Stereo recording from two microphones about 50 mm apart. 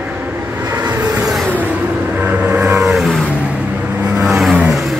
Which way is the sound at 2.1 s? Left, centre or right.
Right.